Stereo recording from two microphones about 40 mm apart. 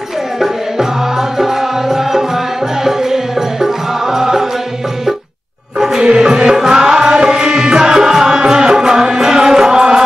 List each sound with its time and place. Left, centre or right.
1.4 s music: centre
5.8 s music: centre